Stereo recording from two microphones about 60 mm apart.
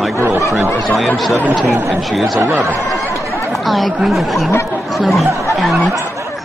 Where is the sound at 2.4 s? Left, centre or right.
Right.